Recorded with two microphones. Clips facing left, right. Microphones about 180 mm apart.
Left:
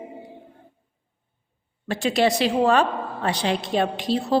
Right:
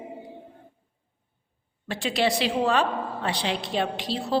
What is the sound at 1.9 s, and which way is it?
A woman's voice, 45° left (ahead or behind).